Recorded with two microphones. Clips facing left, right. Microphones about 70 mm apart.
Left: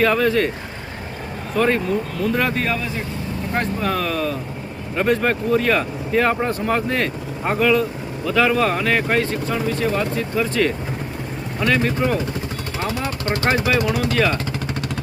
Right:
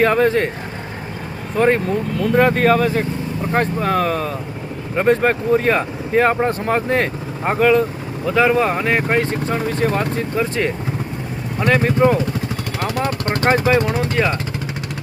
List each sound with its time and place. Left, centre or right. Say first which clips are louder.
0.0 s speech: right 2 dB; right
1.5 s speech: right 3 dB; right
3.5 s speech: right 4 dB; right
8.3 s speech: right 2 dB; right
9.6 s speech: right 2 dB; right